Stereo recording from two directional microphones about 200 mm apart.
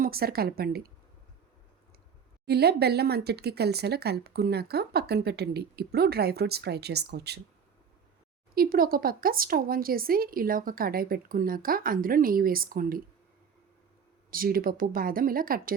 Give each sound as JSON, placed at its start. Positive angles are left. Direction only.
{"t": 0.0, "sound": "speech", "side_deg": -50}
{"t": 2.5, "sound": "speech", "side_deg": -55}
{"t": 8.5, "sound": "speech", "side_deg": -45}
{"t": 14.3, "sound": "speech", "side_deg": -45}